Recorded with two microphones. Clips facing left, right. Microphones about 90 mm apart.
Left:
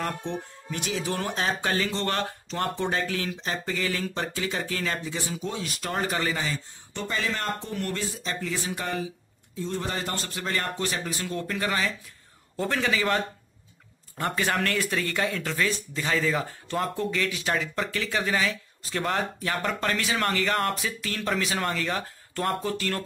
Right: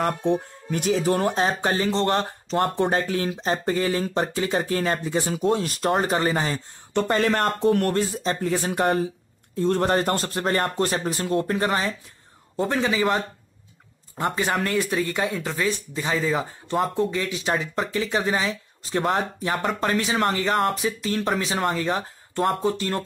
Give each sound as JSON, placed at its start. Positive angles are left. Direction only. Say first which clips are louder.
{"t": 0.0, "sound": "speech", "louder": "right 8 dB", "side_deg": -50}
{"t": 2.5, "sound": "speech", "louder": "right 7 dB", "side_deg": -45}
{"t": 6.9, "sound": "speech", "louder": "right 9 dB", "side_deg": -60}
{"t": 12.5, "sound": "speech", "louder": "right 3 dB", "side_deg": -20}
{"t": 14.1, "sound": "speech", "louder": "right 3 dB", "side_deg": -20}